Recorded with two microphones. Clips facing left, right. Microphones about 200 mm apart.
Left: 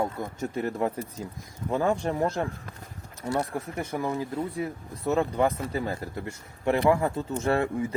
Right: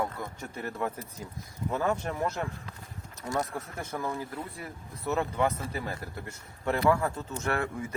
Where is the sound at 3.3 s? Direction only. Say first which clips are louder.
Left 4 dB; 10° left (ahead or behind).